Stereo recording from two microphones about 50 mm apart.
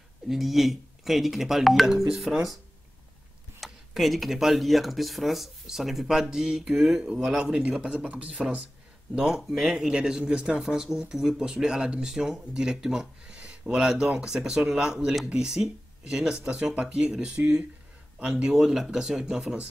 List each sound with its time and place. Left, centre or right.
0.3 s speech: centre
3.6 s speech: centre; by 8.6 s right
9.3 s speech: centre